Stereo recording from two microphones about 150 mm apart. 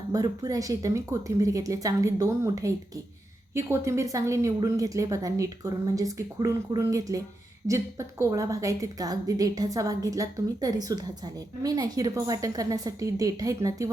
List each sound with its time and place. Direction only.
0.1 s a woman's voice: 25° right (ahead or behind)